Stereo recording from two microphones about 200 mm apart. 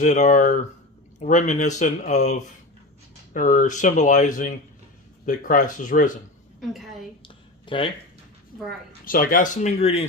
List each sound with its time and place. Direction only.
0.0 s speech: 40° left (ahead or behind)
6.6 s a woman's voice: centre (ahead or behind)
7.6 s a sound: 25° left (ahead or behind)
9.0 s speech: 45° left (ahead or behind)